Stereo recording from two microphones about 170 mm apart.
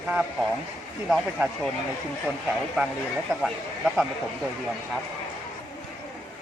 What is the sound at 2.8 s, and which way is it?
Speech, 5° right (ahead or behind).